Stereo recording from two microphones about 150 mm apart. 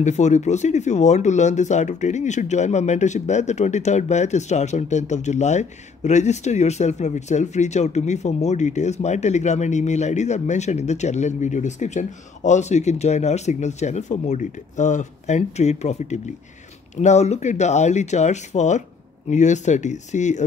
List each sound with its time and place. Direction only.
0.0 s speech: 50° left (ahead or behind)